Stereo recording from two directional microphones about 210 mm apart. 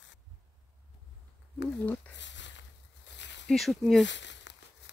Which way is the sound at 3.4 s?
Centre (ahead or behind).